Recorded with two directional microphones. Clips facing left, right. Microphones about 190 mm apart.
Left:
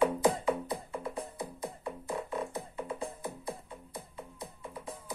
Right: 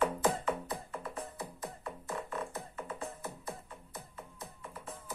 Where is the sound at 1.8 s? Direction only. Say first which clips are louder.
Left 3 dB; 15° left (ahead or behind).